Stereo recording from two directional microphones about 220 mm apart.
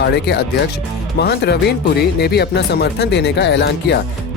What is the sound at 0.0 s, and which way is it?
Speech, 50° left (ahead or behind).